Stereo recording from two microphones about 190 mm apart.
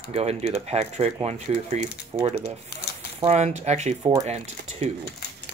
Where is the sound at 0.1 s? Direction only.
35° right (ahead or behind).